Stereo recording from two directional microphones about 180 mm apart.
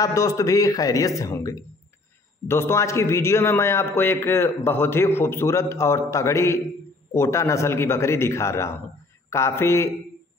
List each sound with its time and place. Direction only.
0.0 s a man's voice: 20° left (ahead or behind)